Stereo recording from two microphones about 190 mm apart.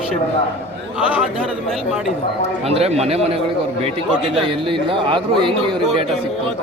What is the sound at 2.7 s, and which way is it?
Speech, 35° right (ahead or behind).